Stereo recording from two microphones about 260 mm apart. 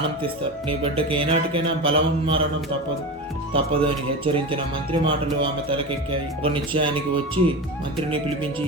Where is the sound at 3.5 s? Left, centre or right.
Right.